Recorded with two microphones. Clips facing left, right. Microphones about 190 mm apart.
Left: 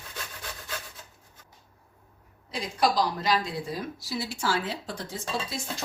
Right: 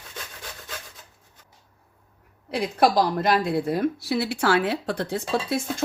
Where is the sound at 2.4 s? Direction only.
60° right (ahead or behind).